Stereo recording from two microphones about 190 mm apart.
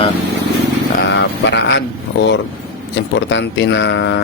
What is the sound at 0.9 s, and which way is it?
Vehicle, 70° left (ahead or behind).